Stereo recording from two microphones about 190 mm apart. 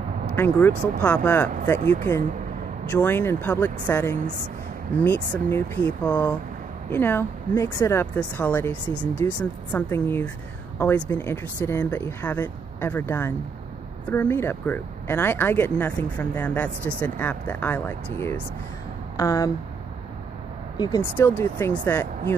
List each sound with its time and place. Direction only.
0.4 s speech: 10° left (ahead or behind)
2.9 s speech: 10° left (ahead or behind)
20.7 s speech: 20° left (ahead or behind)